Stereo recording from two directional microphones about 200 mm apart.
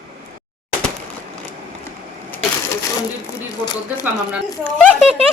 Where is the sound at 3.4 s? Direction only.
20° left (ahead or behind).